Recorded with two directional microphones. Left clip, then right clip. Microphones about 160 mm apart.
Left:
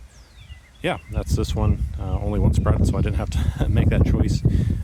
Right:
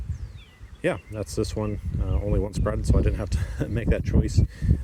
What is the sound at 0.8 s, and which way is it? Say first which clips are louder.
Speech: left 1 dB; 25° left (ahead or behind).